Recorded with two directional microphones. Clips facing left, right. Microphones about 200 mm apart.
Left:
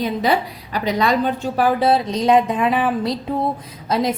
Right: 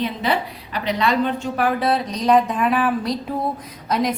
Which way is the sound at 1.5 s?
30° left (ahead or behind).